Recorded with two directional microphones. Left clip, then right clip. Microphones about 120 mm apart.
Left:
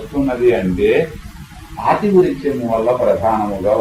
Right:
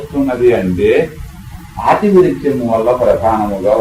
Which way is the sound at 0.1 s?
35° left (ahead or behind).